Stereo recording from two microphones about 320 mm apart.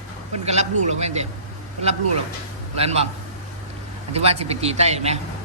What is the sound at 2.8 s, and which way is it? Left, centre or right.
Speech, centre.